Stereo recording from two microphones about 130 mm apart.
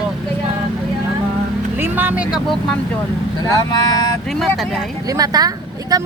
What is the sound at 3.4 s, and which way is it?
Speech, 30° left (ahead or behind).